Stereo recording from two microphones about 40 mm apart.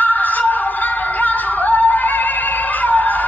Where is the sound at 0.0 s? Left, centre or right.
Left.